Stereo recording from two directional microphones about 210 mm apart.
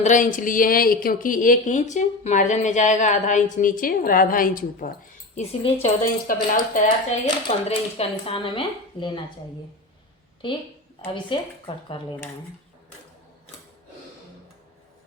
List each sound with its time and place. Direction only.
0.0 s speech: 35° left (ahead or behind)
5.4 s speech: 30° left (ahead or behind)
10.4 s speech: 25° left (ahead or behind)